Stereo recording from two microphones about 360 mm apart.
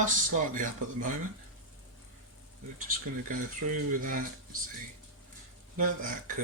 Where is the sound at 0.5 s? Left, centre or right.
Right.